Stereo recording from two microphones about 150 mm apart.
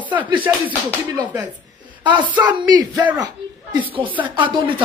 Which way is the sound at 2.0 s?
30° right (ahead or behind).